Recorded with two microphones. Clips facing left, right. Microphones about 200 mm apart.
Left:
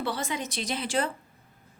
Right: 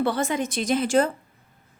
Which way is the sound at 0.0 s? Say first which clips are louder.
Right 7 dB; 50° right (ahead or behind).